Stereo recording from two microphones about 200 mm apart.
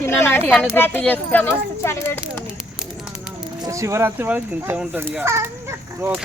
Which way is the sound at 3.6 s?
15° right (ahead or behind).